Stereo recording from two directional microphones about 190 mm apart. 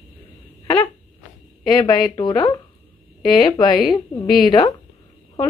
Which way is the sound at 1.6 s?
25° left (ahead or behind).